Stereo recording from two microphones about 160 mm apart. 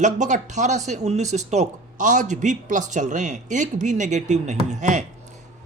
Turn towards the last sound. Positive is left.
turn(degrees=-50)  # may be behind; listen again after turning